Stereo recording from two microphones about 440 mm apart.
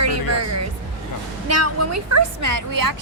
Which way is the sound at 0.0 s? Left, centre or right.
Right.